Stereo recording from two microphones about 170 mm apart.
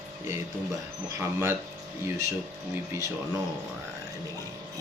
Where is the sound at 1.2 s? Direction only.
15° right (ahead or behind).